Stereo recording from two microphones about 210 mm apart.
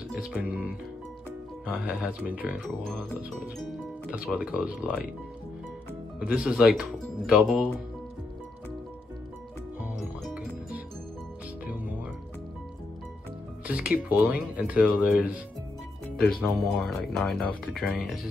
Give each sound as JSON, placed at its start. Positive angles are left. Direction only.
{"t": 0.1, "sound": "speech", "side_deg": -5}
{"t": 6.1, "sound": "speech", "side_deg": -5}
{"t": 9.8, "sound": "music", "side_deg": -5}
{"t": 13.7, "sound": "speech", "side_deg": -5}